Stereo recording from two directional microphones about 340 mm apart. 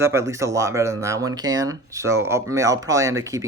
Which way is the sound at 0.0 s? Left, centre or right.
Centre.